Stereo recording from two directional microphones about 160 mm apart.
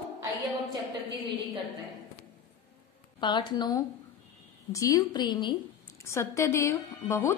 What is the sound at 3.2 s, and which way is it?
A woman's voice, 30° left (ahead or behind).